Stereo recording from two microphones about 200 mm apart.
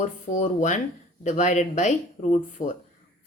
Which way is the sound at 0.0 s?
35° left (ahead or behind).